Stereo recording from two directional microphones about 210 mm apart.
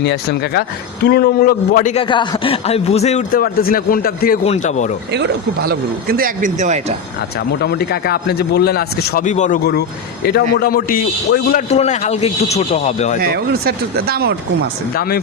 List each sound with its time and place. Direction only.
0.0 s a man's voice: 50° left (ahead or behind)
4.4 s speech: 30° left (ahead or behind)
5.1 s speech: 50° right (ahead or behind); by 6.9 s 35° right (ahead or behind)
7.3 s a man's voice: 50° left (ahead or behind)
9.2 s speech: 35° left (ahead or behind)
10.2 s a man's voice: 50° left (ahead or behind)
11.7 s speech: 30° left (ahead or behind)
13.2 s speech: 45° right (ahead or behind)
14.9 s a man's voice: 45° left (ahead or behind)